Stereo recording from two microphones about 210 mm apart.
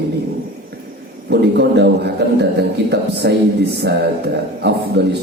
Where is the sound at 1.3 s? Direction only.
55° right (ahead or behind).